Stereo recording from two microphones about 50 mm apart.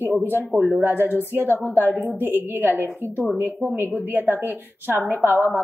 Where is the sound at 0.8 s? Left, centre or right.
Right.